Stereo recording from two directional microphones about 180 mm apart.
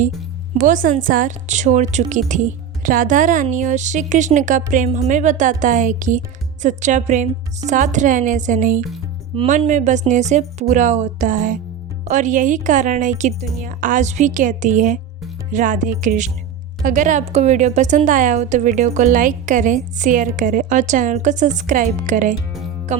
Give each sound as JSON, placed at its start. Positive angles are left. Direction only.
{"t": 0.5, "sound": "speech", "side_deg": -45}
{"t": 22.9, "sound": "music", "side_deg": -40}